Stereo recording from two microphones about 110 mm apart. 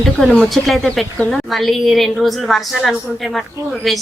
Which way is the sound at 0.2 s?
Centre (ahead or behind).